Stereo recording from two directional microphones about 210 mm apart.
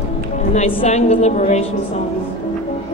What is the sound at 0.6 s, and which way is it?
A woman's voice, 30° left (ahead or behind).